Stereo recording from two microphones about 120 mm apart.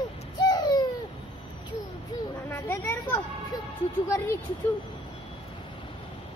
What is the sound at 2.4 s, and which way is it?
Speech, 20° left (ahead or behind).